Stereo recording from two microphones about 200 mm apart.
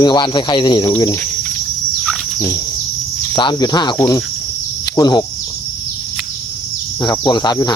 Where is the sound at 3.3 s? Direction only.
25° left (ahead or behind).